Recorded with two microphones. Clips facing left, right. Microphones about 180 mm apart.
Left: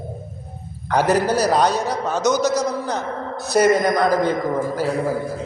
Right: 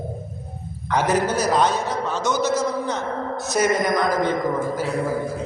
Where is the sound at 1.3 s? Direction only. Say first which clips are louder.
Left 2 dB; 35° left (ahead or behind).